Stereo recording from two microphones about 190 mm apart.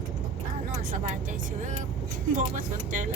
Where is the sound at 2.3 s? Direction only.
45° right (ahead or behind).